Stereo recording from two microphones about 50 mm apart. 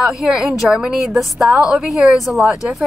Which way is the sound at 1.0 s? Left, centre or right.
Centre.